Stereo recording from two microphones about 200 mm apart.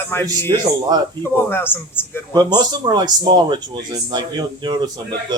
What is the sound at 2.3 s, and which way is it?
Speech, 20° right (ahead or behind).